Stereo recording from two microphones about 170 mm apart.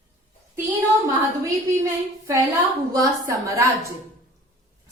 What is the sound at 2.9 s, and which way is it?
Speech, 20° right (ahead or behind).